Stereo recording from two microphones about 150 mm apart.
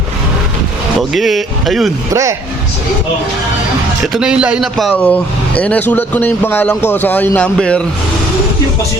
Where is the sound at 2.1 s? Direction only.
20° right (ahead or behind).